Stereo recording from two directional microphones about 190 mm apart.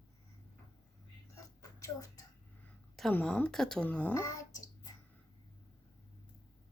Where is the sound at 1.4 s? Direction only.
15° left (ahead or behind).